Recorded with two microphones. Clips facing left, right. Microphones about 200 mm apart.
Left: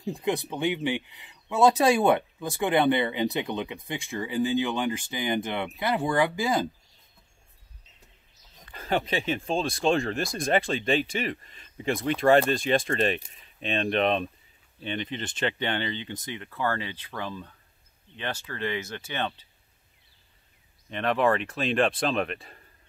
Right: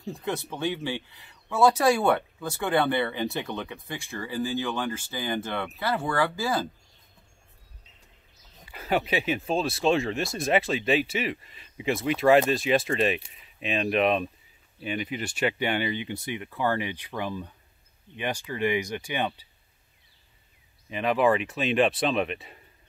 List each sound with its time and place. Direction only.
0.0 s speech: 15° left (ahead or behind)
8.6 s speech: 10° right (ahead or behind)
20.9 s speech: 5° right (ahead or behind)